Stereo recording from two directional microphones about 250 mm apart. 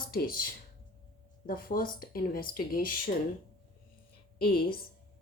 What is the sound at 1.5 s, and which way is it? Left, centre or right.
Speech, left.